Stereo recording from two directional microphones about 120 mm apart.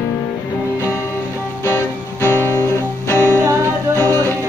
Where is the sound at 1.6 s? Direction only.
20° left (ahead or behind).